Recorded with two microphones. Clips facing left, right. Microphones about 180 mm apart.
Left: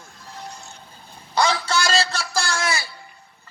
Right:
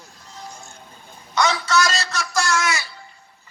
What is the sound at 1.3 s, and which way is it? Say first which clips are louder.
A man's voice: right 1 dB; 30° left (ahead or behind).